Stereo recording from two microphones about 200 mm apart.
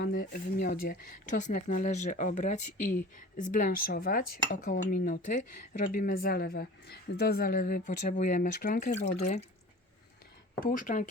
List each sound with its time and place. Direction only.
0.0 s speech: 45° left (ahead or behind)
10.6 s speech: 45° left (ahead or behind)